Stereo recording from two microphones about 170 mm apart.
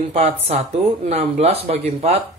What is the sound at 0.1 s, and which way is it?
Speech, 40° right (ahead or behind).